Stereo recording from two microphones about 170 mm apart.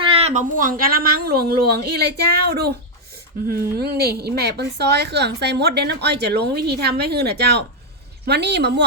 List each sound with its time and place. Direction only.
0.0 s a woman's voice: 35° right (ahead or behind); by 8.8 s 80° right